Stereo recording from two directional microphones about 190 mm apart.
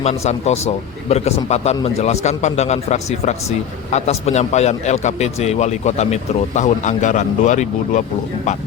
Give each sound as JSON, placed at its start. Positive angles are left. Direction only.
{"t": 0.0, "sound": "a man's voice", "side_deg": 35}